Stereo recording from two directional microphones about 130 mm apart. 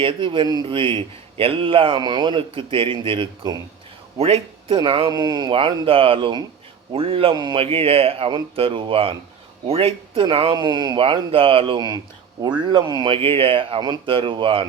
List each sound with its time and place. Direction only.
0.0 s a man's voice: 40° right (ahead or behind)
4.2 s a man's voice: 50° right (ahead or behind)
7.3 s a man's voice: 30° right (ahead or behind)
7.6 s a man's voice: 45° right (ahead or behind)
11.0 s a man's voice: 45° right (ahead or behind)
13.1 s a man's voice: 45° right (ahead or behind)